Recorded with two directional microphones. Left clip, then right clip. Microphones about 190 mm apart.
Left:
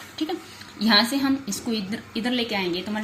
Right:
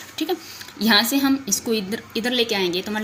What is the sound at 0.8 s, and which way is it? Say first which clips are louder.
A woman's voice: right 2 dB; 30° right (ahead or behind).